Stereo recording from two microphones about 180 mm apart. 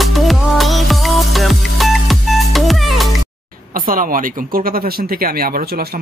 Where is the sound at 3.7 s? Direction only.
50° right (ahead or behind).